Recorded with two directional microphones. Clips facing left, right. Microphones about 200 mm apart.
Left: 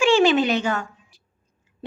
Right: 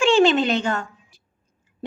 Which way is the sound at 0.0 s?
5° left (ahead or behind).